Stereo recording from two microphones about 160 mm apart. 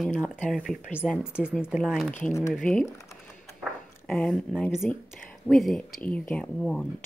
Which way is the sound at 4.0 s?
5° left (ahead or behind).